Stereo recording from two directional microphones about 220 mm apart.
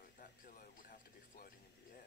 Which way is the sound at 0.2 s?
40° left (ahead or behind).